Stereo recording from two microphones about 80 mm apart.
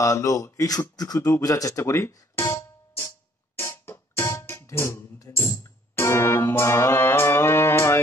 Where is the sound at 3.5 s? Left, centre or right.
Left.